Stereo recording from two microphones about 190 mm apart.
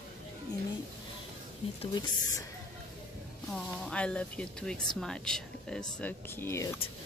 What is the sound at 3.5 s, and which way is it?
Speech, 5° left (ahead or behind).